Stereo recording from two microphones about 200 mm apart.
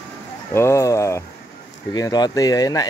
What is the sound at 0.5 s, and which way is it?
Speech, 15° left (ahead or behind).